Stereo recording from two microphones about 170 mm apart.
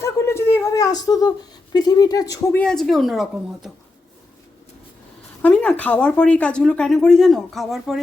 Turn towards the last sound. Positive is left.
turn(degrees=0)  # may be behind; listen again after turning